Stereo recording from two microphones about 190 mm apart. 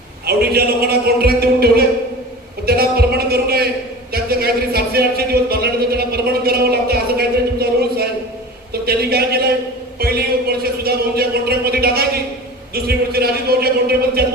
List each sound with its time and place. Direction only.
0.3 s speech: 55° right (ahead or behind)
2.6 s a sound: 55° right (ahead or behind)
8.9 s a man's voice: 55° right (ahead or behind)